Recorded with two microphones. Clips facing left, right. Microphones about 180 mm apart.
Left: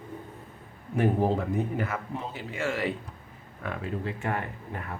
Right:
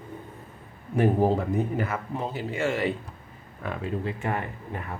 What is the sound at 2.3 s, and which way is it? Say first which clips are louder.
Speech: right 4 dB; 25° right (ahead or behind).